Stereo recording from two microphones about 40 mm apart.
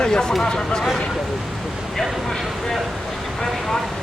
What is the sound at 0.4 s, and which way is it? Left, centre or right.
Speech, centre.